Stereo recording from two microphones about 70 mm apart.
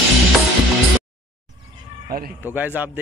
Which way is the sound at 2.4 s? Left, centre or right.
Right.